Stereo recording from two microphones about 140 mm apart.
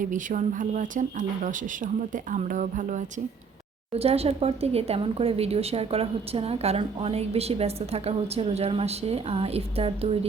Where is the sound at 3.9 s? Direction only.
45° right (ahead or behind).